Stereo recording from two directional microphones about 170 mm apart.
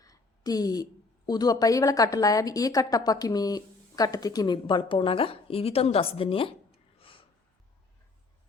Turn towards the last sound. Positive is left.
turn(degrees=30)  # may be behind; listen again after turning